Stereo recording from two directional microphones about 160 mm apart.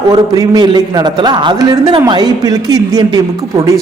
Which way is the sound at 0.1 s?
25° right (ahead or behind).